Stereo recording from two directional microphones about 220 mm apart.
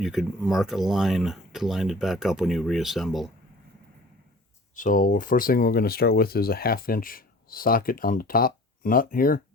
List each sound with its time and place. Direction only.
0.0 s speech: centre (ahead or behind)
4.7 s speech: 35° left (ahead or behind)